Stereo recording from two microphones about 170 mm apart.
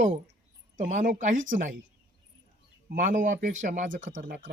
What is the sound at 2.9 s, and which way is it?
Speech, 50° right (ahead or behind).